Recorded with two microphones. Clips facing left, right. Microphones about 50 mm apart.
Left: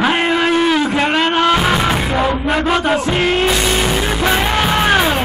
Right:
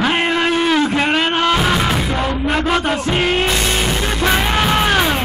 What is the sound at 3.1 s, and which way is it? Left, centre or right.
Music, centre.